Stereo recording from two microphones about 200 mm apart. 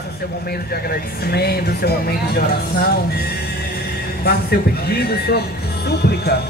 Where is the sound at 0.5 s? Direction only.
50° left (ahead or behind).